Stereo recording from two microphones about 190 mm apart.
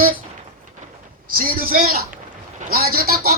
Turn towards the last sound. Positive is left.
turn(degrees=-50)  # may be behind; listen again after turning